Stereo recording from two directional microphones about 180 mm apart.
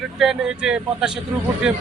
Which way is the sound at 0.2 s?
5° right (ahead or behind).